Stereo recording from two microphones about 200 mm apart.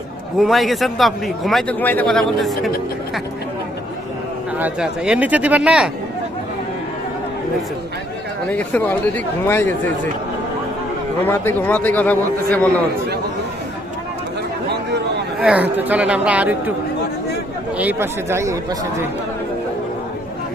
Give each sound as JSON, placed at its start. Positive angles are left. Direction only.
{"t": 0.3, "sound": "a man's voice", "side_deg": 0}
{"t": 4.5, "sound": "speech", "side_deg": -5}
{"t": 8.4, "sound": "a man's voice", "side_deg": 5}
{"t": 11.2, "sound": "a man's voice", "side_deg": 10}
{"t": 15.4, "sound": "speech", "side_deg": -5}
{"t": 17.7, "sound": "speech", "side_deg": -10}